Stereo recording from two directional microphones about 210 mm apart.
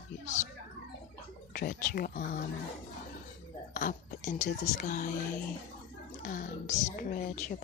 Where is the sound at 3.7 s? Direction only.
40° left (ahead or behind).